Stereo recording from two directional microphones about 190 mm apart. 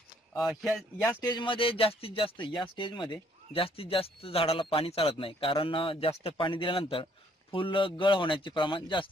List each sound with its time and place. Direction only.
0.4 s speech: centre (ahead or behind)
1.2 s speech: 25° left (ahead or behind)